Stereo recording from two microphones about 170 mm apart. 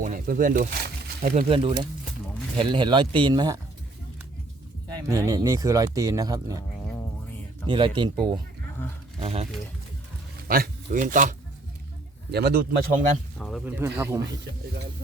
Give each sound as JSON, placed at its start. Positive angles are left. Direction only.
{"t": 0.0, "sound": "speech", "side_deg": -50}
{"t": 1.5, "sound": "speech", "side_deg": -30}
{"t": 5.0, "sound": "speech", "side_deg": -20}
{"t": 7.7, "sound": "speech", "side_deg": -30}
{"t": 10.5, "sound": "speech", "side_deg": -55}
{"t": 12.3, "sound": "a man's voice", "side_deg": -70}
{"t": 13.7, "sound": "speech", "side_deg": -10}